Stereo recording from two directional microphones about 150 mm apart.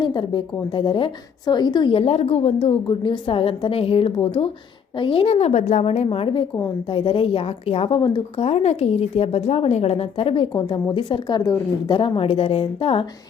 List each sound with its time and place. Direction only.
0.0 s speech: 30° left (ahead or behind)
2.8 s a woman's voice: 30° left (ahead or behind)